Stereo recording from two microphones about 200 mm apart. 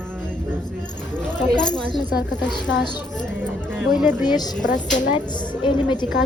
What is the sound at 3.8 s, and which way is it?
Speech, 5° right (ahead or behind).